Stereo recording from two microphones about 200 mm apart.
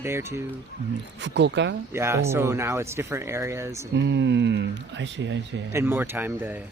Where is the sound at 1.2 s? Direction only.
60° right (ahead or behind).